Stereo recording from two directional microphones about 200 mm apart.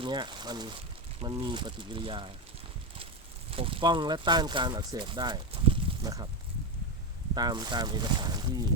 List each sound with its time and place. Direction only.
0.0 s speech: 20° right (ahead or behind)
3.5 s speech: 25° right (ahead or behind)
7.3 s speech: 20° right (ahead or behind)